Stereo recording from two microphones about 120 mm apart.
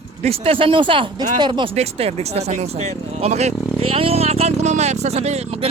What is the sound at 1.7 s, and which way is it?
Speech, 60° right (ahead or behind).